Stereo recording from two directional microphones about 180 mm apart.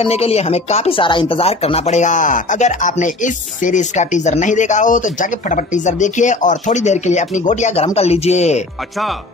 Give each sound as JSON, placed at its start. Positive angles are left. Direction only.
{"t": 0.0, "sound": "speech", "side_deg": 35}